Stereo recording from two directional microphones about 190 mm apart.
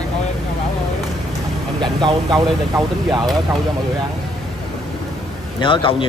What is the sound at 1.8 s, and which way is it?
Speech, 25° right (ahead or behind).